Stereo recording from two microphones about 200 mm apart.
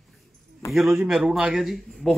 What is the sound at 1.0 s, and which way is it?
Speech, centre (ahead or behind).